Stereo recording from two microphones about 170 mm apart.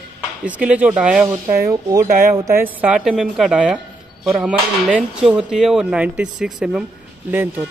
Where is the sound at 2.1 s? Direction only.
50° right (ahead or behind).